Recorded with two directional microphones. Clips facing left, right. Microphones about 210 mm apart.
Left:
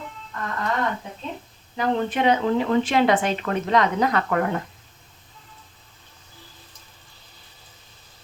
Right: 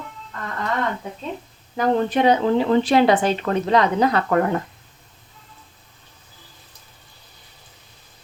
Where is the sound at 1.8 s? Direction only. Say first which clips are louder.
Right 4 dB; 35° right (ahead or behind).